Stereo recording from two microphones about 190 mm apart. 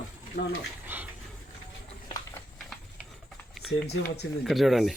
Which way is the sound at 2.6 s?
Centre (ahead or behind).